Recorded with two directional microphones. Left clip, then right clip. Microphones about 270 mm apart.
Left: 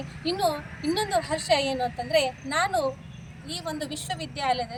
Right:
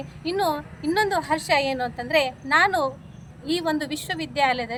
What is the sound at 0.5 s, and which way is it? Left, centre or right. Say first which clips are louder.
Speech: right 2 dB; centre.